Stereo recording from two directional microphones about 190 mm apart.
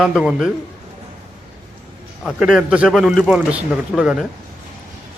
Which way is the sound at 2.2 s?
Centre (ahead or behind).